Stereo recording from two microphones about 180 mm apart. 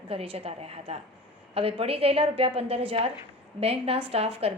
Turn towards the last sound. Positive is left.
turn(degrees=-35)  # may be behind; listen again after turning